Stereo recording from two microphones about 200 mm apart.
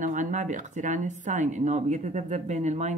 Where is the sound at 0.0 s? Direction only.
40° right (ahead or behind).